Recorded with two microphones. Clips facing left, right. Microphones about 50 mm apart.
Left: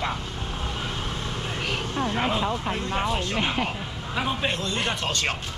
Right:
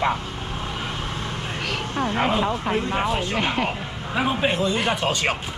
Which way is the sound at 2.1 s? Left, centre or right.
Centre.